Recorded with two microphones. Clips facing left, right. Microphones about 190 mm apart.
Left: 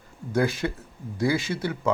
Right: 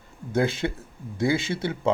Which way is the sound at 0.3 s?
25° right (ahead or behind).